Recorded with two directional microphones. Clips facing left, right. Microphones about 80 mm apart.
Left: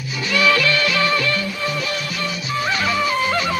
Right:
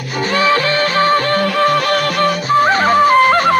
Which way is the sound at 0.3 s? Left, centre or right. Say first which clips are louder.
Right 3 dB; right.